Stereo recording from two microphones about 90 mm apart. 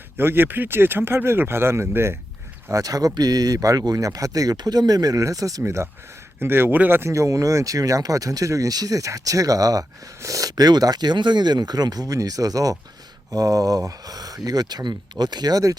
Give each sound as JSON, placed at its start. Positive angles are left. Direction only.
{"t": 0.2, "sound": "speech", "side_deg": -25}
{"t": 2.7, "sound": "speech", "side_deg": -40}
{"t": 7.1, "sound": "speech", "side_deg": -35}